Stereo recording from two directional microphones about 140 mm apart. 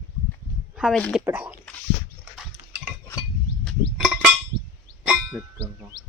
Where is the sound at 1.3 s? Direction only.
15° right (ahead or behind).